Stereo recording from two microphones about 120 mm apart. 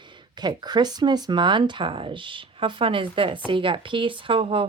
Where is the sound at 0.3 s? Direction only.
35° right (ahead or behind).